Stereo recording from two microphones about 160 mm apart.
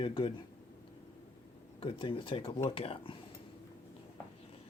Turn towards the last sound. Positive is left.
turn(degrees=35)  # may be behind; listen again after turning